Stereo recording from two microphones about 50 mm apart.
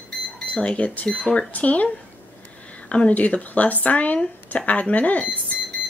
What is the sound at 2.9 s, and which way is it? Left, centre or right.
Speech, left.